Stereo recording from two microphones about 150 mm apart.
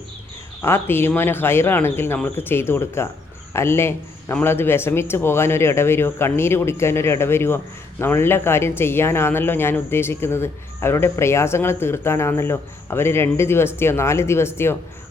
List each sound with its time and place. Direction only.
0.6 s speech: 15° left (ahead or behind)